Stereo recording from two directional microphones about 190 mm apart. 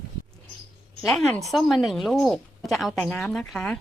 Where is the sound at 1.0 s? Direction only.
Centre (ahead or behind).